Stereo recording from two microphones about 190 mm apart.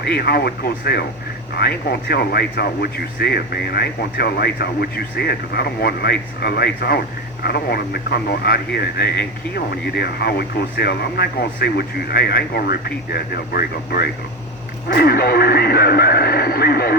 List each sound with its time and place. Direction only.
0.0 s speech: 55° left (ahead or behind)